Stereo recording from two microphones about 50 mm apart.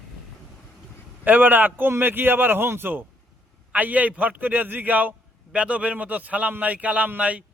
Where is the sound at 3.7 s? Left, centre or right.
Right.